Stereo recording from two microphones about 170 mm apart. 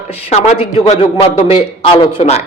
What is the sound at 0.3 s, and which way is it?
A man's voice, 40° left (ahead or behind).